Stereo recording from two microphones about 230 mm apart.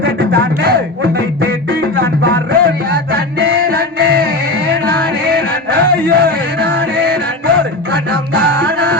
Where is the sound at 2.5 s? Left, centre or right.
Right.